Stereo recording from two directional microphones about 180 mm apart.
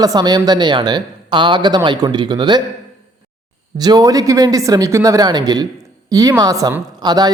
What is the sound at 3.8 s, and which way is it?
Speech, 20° right (ahead or behind).